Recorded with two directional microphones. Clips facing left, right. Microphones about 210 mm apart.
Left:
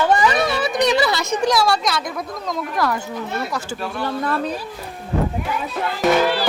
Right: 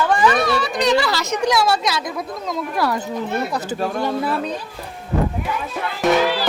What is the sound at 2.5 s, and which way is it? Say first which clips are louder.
Speech: even; 10° right (ahead or behind).